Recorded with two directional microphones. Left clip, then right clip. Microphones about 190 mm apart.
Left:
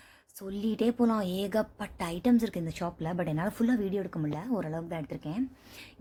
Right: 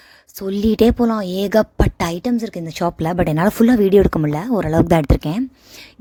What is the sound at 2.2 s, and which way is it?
Speech, 25° right (ahead or behind).